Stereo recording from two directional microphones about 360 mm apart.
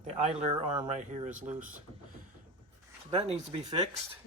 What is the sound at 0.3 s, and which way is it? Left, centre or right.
Speech, centre.